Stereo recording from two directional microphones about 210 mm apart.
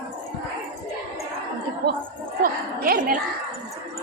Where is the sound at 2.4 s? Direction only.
45° right (ahead or behind).